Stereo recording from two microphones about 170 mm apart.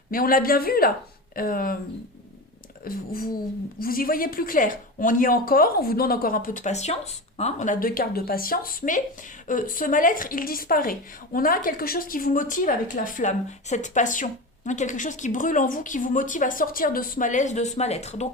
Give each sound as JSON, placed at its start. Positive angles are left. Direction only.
{"t": 0.1, "sound": "speech", "side_deg": 55}
{"t": 2.8, "sound": "a woman's voice", "side_deg": 60}